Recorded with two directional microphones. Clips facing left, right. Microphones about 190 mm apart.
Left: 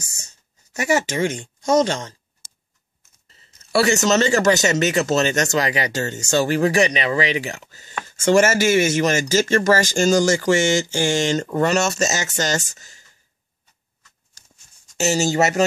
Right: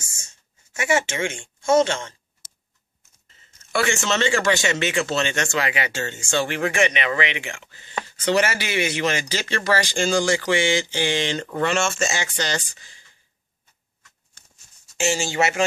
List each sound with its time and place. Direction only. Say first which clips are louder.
0.0 s speech: left 4 dB; 35° left (ahead or behind)
3.3 s speech: left 4 dB; 35° left (ahead or behind)
15.0 s speech: left 4 dB; 40° left (ahead or behind)